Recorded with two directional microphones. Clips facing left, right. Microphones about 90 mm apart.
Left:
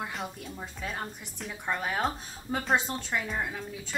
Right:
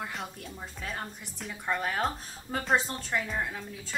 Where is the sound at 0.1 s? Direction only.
Centre (ahead or behind).